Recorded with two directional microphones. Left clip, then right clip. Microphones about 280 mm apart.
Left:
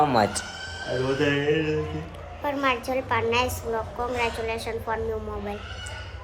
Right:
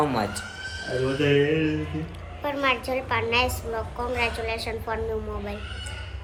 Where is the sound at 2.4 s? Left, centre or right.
Centre.